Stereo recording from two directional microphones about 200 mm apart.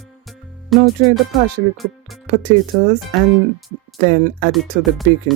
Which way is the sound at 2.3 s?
45° right (ahead or behind).